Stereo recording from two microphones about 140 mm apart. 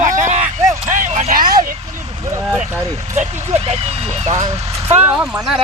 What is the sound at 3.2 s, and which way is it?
Speech, 55° right (ahead or behind).